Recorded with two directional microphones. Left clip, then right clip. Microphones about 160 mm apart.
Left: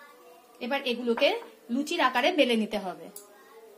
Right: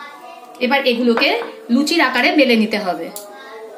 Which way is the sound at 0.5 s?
50° left (ahead or behind).